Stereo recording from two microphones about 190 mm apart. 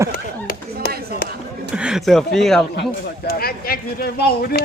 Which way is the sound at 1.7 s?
5° right (ahead or behind).